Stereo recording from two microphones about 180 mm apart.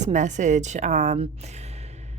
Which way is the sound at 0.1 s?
40° right (ahead or behind).